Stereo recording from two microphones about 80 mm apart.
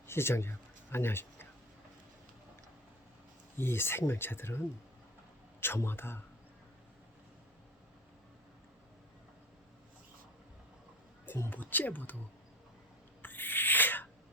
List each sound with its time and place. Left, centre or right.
0.1 s speech: left
3.6 s speech: left
11.5 s speech: left
13.2 s owl: left